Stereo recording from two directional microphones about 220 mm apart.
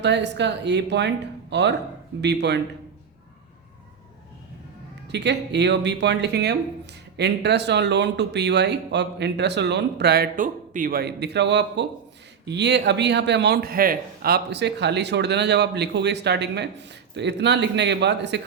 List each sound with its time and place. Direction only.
0.0 s speech: 50° right (ahead or behind)
5.0 s speech: 50° right (ahead or behind)